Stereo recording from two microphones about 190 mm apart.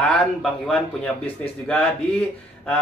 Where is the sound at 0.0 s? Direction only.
5° left (ahead or behind).